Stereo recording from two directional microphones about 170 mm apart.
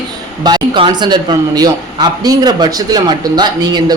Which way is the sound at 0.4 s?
25° right (ahead or behind).